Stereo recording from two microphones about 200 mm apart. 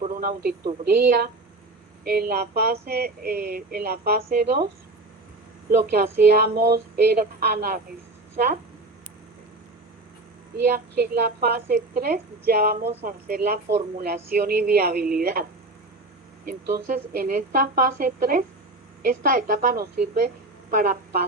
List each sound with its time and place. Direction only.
0.0 s radio: 45° right (ahead or behind)
0.9 s speech: 50° right (ahead or behind)
10.7 s speech: 50° right (ahead or behind)
12.9 s speech: 30° right (ahead or behind)
13.2 s speech: 50° right (ahead or behind)
16.5 s speech: 45° right (ahead or behind)